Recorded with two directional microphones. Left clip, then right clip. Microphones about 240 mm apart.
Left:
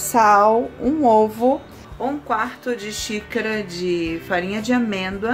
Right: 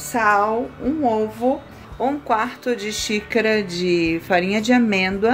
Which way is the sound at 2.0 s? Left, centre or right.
Centre.